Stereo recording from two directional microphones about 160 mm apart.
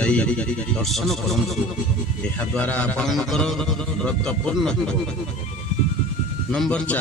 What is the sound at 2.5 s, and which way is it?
A man's voice, 10° left (ahead or behind).